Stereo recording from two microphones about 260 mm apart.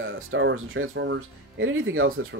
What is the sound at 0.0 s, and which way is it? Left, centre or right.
Speech, right.